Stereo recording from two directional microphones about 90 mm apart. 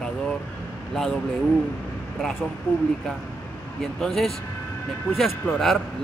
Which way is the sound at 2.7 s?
25° left (ahead or behind).